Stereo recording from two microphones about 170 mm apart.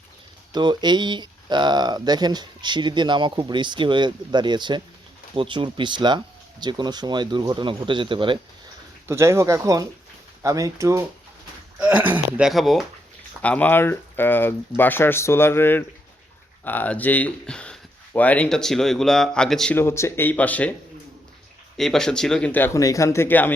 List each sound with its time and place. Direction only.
0.5 s speech: 25° right (ahead or behind)
9.0 s speech: 15° right (ahead or behind); by 19.7 s 5° left (ahead or behind)
19.7 s speech: 15° left (ahead or behind)
21.8 s speech: 5° left (ahead or behind)